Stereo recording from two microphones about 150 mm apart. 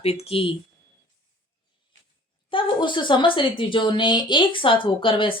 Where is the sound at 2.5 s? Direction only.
35° left (ahead or behind).